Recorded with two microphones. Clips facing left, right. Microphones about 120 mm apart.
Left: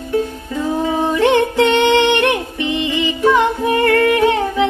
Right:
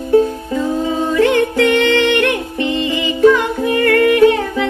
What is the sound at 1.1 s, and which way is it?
Music, 20° left (ahead or behind).